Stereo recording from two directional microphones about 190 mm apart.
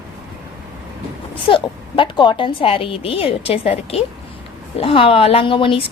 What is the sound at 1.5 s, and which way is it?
A woman's voice, 25° left (ahead or behind).